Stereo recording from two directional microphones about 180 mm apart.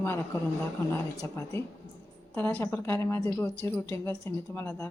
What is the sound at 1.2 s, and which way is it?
A woman's voice, 20° left (ahead or behind).